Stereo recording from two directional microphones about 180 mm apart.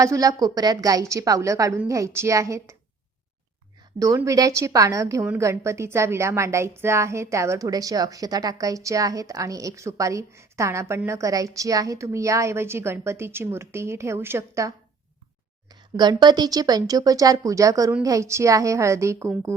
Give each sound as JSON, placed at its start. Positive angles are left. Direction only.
{"t": 0.0, "sound": "a woman's voice", "side_deg": -20}
{"t": 4.0, "sound": "a woman's voice", "side_deg": -20}
{"t": 15.7, "sound": "a woman's voice", "side_deg": -25}